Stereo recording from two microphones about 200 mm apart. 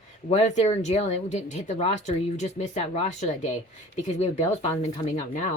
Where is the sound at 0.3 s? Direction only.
35° left (ahead or behind).